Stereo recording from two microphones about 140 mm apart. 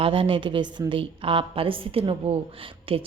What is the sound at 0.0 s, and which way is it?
A woman's voice, 40° right (ahead or behind).